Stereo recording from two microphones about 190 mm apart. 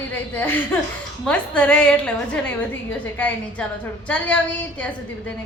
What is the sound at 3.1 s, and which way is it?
Speech, 10° left (ahead or behind).